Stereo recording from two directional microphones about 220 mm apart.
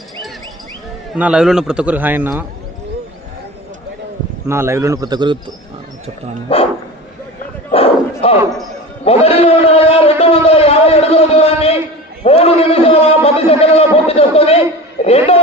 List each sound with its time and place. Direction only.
1.1 s a man's voice: 5° right (ahead or behind)
4.4 s a man's voice: 10° right (ahead or behind)
6.5 s a man's voice: 25° left (ahead or behind)
7.7 s crowd: 25° left (ahead or behind)
9.0 s a man's voice: 25° left (ahead or behind)